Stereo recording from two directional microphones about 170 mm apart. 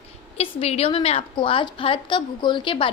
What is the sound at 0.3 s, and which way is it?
A woman's voice, 35° left (ahead or behind).